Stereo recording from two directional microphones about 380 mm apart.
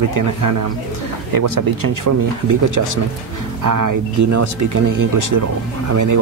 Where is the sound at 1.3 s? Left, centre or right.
Right.